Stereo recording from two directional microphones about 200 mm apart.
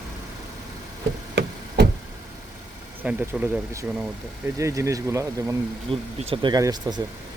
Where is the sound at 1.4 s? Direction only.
55° right (ahead or behind).